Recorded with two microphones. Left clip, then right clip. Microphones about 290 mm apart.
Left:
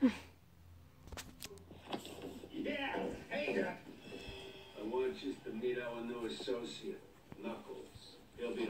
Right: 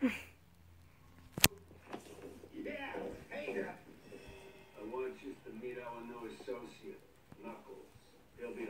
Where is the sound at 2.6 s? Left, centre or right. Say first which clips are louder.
Left 4 dB; left.